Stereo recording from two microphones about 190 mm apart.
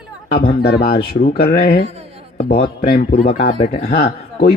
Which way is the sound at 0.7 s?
55° left (ahead or behind).